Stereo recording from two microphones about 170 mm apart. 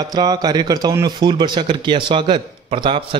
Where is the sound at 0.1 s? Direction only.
25° right (ahead or behind).